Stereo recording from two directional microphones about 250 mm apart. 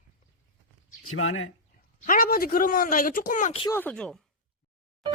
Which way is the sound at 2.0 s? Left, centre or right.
Left.